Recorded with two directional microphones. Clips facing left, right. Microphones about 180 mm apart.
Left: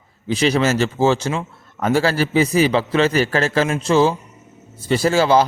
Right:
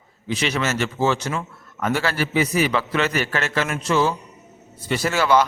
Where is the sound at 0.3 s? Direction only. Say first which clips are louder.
Left 6 dB; 35° left (ahead or behind).